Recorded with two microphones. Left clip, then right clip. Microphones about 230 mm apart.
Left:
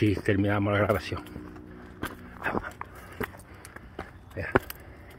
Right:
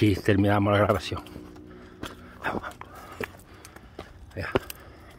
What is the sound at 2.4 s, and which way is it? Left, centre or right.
Speech, centre.